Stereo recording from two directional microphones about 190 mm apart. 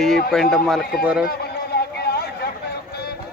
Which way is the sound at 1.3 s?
60° left (ahead or behind).